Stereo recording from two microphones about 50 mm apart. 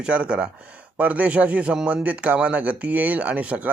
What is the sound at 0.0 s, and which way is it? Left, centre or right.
Speech, right.